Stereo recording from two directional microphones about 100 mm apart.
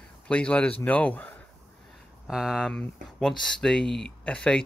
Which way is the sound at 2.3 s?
5° right (ahead or behind).